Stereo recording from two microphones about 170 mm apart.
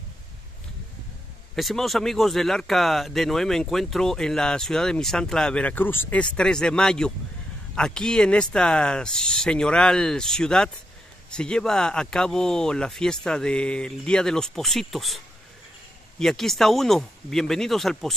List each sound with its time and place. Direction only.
1.5 s speech: centre (ahead or behind)